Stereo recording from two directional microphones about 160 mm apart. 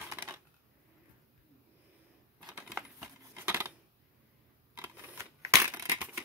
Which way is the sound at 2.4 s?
5° right (ahead or behind).